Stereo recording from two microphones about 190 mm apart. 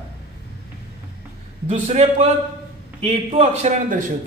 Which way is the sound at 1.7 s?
35° right (ahead or behind).